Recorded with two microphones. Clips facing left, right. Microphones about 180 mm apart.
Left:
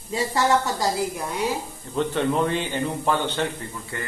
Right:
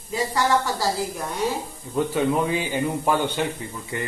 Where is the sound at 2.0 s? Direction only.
5° right (ahead or behind).